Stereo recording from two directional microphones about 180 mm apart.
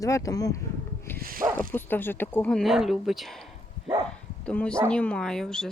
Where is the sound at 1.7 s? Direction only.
10° left (ahead or behind).